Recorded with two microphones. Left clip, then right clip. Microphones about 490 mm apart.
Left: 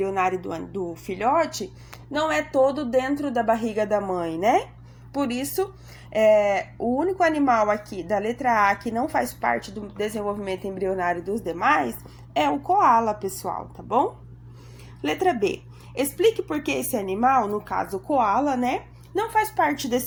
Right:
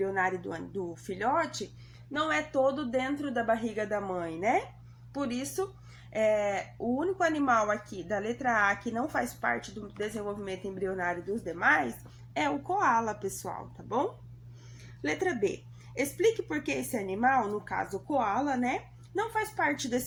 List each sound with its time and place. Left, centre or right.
0.0 s speech: left
15.1 s a woman's voice: left